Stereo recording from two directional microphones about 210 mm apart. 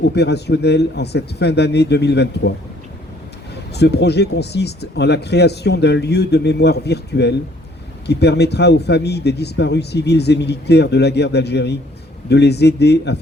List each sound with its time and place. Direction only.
0.0 s speech: 50° left (ahead or behind)
3.5 s speech: 50° left (ahead or behind)